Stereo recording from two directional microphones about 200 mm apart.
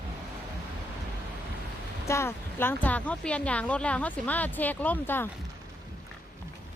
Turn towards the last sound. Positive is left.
turn(degrees=10)  # may be behind; listen again after turning